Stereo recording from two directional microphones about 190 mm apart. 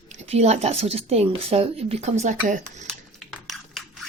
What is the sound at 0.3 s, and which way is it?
Speech, 35° right (ahead or behind).